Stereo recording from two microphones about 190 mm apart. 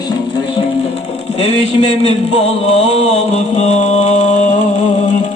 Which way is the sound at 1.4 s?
35° left (ahead or behind).